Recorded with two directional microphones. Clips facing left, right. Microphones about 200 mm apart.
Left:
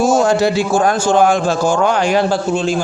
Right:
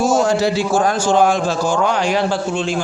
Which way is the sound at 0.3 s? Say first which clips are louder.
Left 2 dB; 55° left (ahead or behind).